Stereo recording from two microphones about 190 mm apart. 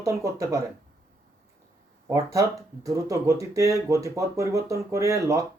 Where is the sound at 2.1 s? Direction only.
15° right (ahead or behind).